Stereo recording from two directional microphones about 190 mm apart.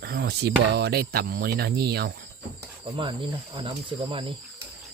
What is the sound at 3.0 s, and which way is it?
Speech, 25° right (ahead or behind).